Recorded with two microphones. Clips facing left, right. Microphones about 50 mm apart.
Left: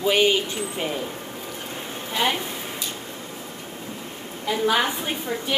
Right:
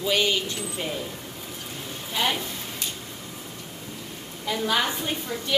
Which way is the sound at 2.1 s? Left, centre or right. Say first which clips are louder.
Left 2 dB; centre.